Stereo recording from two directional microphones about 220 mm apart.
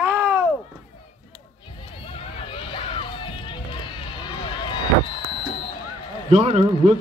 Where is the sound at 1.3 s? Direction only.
25° left (ahead or behind).